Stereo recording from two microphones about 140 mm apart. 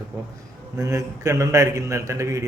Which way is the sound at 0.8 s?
25° right (ahead or behind).